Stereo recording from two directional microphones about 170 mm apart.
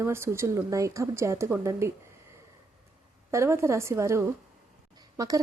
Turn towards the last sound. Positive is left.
turn(degrees=-20)  # may be behind; listen again after turning